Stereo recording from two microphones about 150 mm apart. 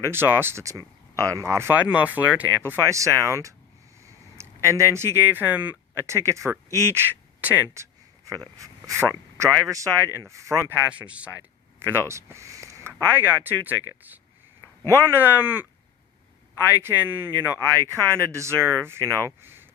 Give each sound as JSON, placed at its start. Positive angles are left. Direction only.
{"t": 0.0, "sound": "speech", "side_deg": -15}
{"t": 10.8, "sound": "speech", "side_deg": -10}
{"t": 16.8, "sound": "speech", "side_deg": -15}